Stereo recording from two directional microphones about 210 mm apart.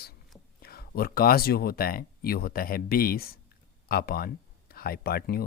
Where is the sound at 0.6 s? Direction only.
45° left (ahead or behind).